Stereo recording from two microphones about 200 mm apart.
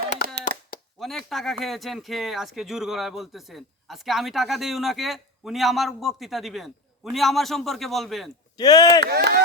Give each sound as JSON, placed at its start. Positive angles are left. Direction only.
{"t": 0.2, "sound": "hands", "side_deg": 50}
{"t": 0.9, "sound": "speech", "side_deg": 0}
{"t": 8.5, "sound": "speech", "side_deg": 20}
{"t": 9.0, "sound": "speech", "side_deg": -50}